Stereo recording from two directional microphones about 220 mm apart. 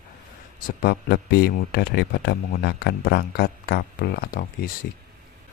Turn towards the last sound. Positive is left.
turn(degrees=40)  # may be behind; listen again after turning